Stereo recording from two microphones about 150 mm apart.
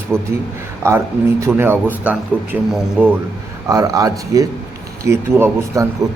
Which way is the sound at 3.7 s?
20° right (ahead or behind).